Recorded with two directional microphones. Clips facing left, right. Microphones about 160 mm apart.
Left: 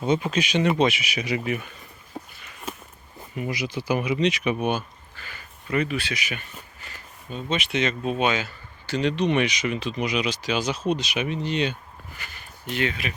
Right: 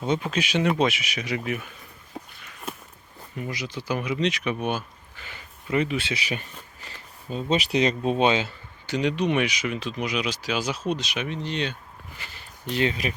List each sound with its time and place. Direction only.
0.0 s speech: centre (ahead or behind)
2.1 s walk: 5° left (ahead or behind)
3.3 s speech: 10° left (ahead or behind)
5.1 s speech: 20° right (ahead or behind)
9.0 s speech: 10° right (ahead or behind); by 11.8 s 5° left (ahead or behind)
12.1 s speech: 30° right (ahead or behind)